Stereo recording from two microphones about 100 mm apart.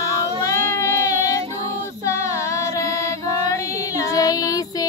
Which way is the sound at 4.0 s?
35° left (ahead or behind).